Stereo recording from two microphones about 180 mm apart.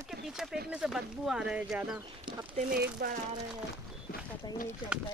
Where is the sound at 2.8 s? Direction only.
60° right (ahead or behind).